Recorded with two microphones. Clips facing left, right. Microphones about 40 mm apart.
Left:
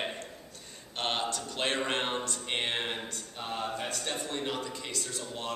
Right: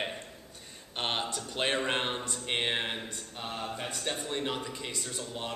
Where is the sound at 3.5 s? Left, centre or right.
Centre.